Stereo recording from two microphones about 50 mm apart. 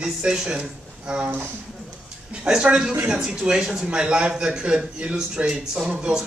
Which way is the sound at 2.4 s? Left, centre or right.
Centre.